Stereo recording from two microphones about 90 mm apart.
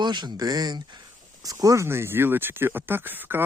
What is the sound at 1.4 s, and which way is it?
Speech, 40° right (ahead or behind).